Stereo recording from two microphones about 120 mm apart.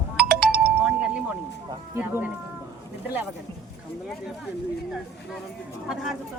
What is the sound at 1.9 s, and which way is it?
Speech, 15° right (ahead or behind).